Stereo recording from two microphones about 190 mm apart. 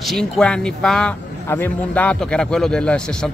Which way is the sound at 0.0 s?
Centre (ahead or behind).